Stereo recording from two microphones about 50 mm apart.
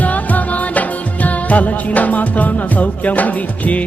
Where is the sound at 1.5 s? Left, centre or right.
Left.